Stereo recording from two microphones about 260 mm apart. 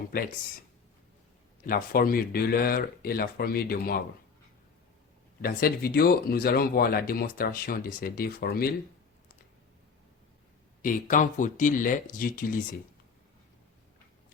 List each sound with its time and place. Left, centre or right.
0.1 s speech: left
1.6 s speech: left
5.4 s speech: left
10.8 s speech: left